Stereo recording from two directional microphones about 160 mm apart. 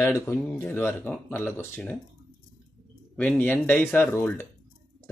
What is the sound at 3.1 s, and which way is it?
Speech, 10° left (ahead or behind).